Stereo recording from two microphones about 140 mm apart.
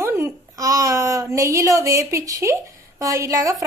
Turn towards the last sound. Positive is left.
turn(degrees=-25)  # may be behind; listen again after turning